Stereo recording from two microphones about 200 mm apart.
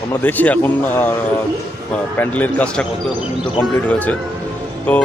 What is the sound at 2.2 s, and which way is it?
Speech, 10° left (ahead or behind).